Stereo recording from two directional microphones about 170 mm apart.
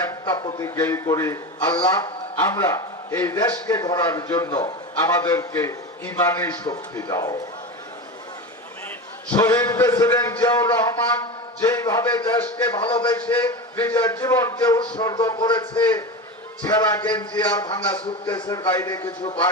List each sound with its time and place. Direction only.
0.1 s a man's voice: 25° left (ahead or behind)
9.3 s a man's voice: 20° left (ahead or behind)
16.6 s a man's voice: 25° left (ahead or behind)
17.3 s a man's voice: 10° left (ahead or behind)